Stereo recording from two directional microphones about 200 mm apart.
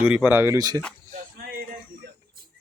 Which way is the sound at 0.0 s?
5° right (ahead or behind).